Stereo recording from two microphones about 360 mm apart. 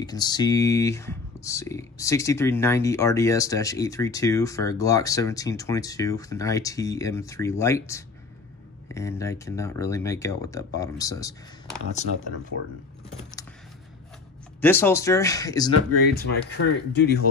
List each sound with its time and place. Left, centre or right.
0.0 s speech: centre
14.6 s speech: centre
16.5 s speech: left